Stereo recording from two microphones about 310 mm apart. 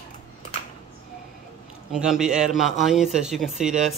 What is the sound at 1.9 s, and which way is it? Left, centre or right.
Speech, centre.